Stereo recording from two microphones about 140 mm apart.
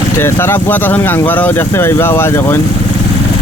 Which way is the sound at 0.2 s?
15° left (ahead or behind).